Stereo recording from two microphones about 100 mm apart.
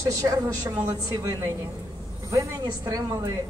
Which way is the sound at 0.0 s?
35° right (ahead or behind).